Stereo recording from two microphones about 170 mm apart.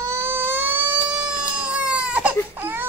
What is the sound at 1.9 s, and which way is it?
Baby cry, 5° right (ahead or behind).